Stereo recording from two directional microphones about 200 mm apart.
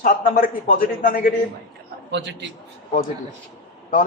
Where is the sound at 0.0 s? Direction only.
40° left (ahead or behind).